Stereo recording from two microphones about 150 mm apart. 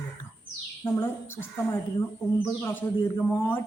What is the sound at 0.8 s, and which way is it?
Speech, 15° left (ahead or behind).